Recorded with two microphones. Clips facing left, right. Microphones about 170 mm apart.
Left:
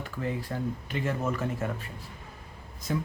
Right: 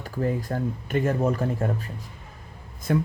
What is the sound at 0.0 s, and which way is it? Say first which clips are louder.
Speech: right 6 dB; 40° right (ahead or behind).